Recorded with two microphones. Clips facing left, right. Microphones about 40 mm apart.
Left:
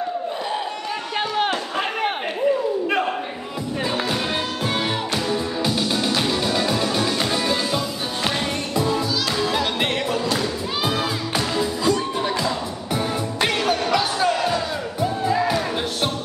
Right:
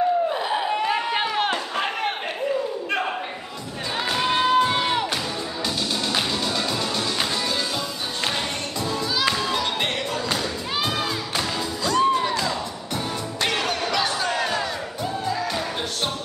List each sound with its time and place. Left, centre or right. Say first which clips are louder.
0.5 s a sound: right 2 dB; centre
1.1 s run: even; centre
1.4 s a sound: left 1 dB; centre
4.1 s music: right 4 dB; centre
5.6 s music: left 1 dB; centre
14.3 s crowd: left 3 dB; centre
15.2 s music: left 6 dB; centre